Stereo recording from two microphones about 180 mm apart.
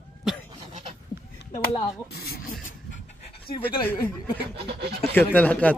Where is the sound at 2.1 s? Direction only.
60° left (ahead or behind).